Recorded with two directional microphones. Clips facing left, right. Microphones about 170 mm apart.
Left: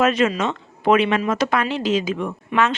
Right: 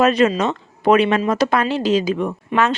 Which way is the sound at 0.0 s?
35° right (ahead or behind).